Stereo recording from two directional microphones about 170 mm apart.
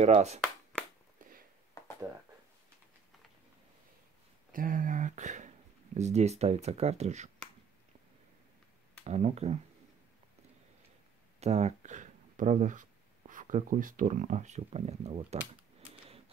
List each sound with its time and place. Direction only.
0.0 s speech: 40° right (ahead or behind)
4.5 s a sound: 55° right (ahead or behind)
5.9 s speech: 40° right (ahead or behind)
9.0 s speech: 40° right (ahead or behind)
11.3 s speech: 40° right (ahead or behind)